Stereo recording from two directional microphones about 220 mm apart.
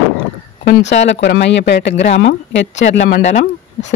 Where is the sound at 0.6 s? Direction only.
50° left (ahead or behind).